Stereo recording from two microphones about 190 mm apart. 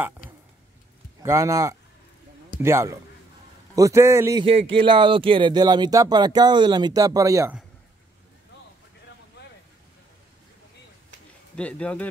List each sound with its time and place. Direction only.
1.2 s a man's voice: 15° right (ahead or behind)
4.5 s speech: 25° right (ahead or behind)
11.5 s speech: 5° left (ahead or behind)